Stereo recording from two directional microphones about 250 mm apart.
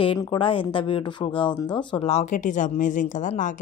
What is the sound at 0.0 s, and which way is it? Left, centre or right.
A woman's voice, centre.